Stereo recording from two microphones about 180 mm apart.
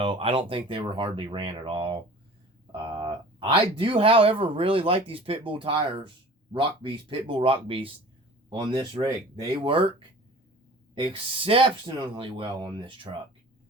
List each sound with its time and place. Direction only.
0.0 s speech: 30° right (ahead or behind)
11.0 s speech: 30° right (ahead or behind)